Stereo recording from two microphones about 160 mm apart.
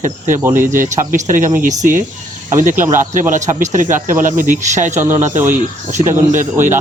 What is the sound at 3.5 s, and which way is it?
Speech, 55° right (ahead or behind).